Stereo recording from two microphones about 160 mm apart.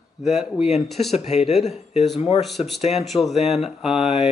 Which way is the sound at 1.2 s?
40° left (ahead or behind).